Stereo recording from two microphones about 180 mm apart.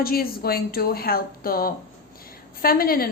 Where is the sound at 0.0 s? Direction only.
55° left (ahead or behind).